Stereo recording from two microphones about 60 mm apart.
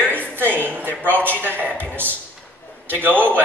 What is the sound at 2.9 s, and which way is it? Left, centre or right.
Speech, right.